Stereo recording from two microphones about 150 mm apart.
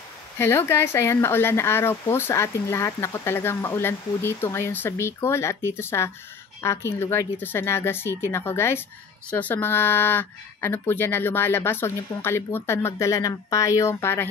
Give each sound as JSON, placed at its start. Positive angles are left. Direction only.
{"t": 0.4, "sound": "speech", "side_deg": 15}